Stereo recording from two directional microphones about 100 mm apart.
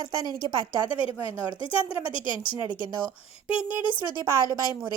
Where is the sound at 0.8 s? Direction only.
65° left (ahead or behind).